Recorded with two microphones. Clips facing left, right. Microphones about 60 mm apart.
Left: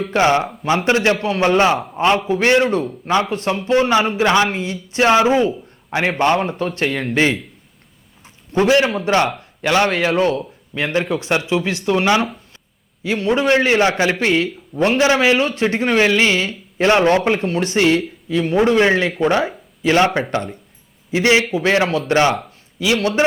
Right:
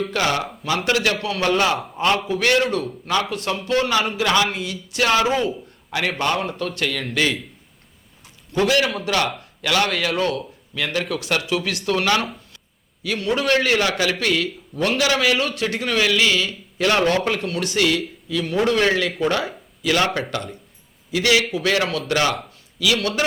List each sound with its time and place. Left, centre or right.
0.1 s a man's voice: left
8.5 s a man's voice: left